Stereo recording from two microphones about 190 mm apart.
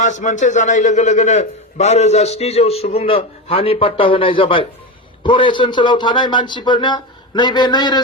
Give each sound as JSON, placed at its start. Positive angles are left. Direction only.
{"t": 0.0, "sound": "a man's voice", "side_deg": 40}